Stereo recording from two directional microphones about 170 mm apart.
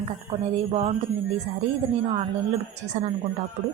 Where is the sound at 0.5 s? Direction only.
35° right (ahead or behind).